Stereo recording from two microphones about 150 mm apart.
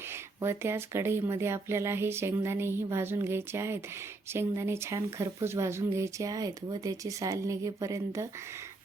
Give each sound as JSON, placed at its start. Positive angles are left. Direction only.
{"t": 0.4, "sound": "speech", "side_deg": -15}